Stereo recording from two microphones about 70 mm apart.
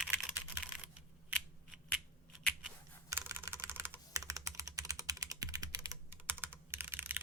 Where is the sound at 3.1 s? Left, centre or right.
Right.